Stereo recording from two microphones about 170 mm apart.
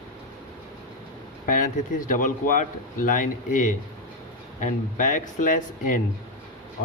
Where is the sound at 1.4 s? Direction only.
50° left (ahead or behind).